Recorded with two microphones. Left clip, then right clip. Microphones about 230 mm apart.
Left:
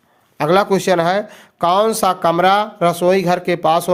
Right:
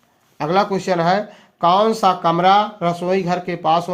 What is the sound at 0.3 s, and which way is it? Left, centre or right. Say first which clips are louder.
Speech: left 4 dB; left.